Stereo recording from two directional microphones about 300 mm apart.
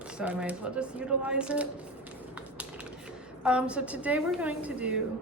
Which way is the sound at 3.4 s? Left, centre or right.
Centre.